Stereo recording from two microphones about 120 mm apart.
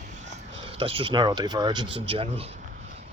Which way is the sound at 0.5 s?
45° right (ahead or behind).